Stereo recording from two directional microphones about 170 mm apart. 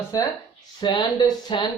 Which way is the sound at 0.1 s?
20° left (ahead or behind).